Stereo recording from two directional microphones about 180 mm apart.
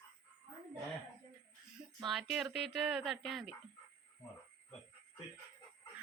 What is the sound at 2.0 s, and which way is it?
Speech, centre (ahead or behind).